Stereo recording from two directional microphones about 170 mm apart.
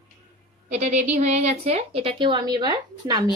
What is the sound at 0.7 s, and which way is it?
A woman's voice, 45° right (ahead or behind).